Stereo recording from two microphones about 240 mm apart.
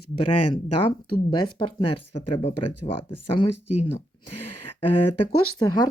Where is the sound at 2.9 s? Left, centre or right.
Left.